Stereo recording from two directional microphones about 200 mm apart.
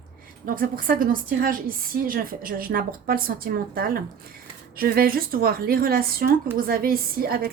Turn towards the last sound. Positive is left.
turn(degrees=-50)  # may be behind; listen again after turning